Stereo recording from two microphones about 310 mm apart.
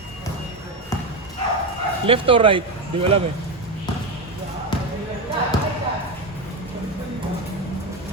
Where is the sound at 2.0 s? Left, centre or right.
Centre.